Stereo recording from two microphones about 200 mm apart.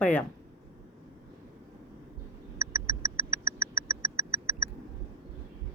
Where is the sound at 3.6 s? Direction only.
15° right (ahead or behind).